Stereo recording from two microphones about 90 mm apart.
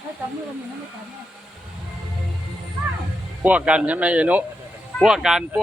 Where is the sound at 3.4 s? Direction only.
15° right (ahead or behind).